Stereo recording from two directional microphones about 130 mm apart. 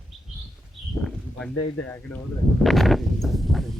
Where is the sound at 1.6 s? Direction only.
15° left (ahead or behind).